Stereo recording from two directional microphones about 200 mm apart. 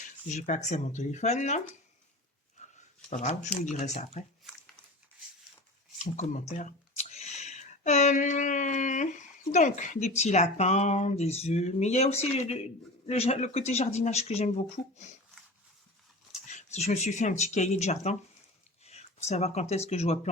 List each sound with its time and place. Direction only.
0.3 s speech: 35° left (ahead or behind)
3.1 s speech: 40° left (ahead or behind)
6.0 s speech: 35° left (ahead or behind)
16.3 s speech: 35° left (ahead or behind)